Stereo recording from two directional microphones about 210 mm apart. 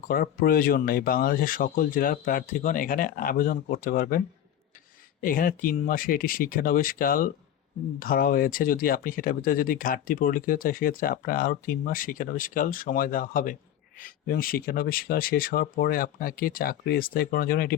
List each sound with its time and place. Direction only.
0.1 s speech: 45° left (ahead or behind)
5.2 s speech: 40° left (ahead or behind)